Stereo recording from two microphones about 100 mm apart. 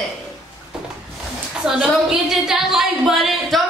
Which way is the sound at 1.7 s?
5° right (ahead or behind).